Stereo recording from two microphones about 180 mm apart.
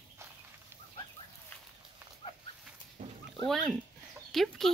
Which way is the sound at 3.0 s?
40° right (ahead or behind).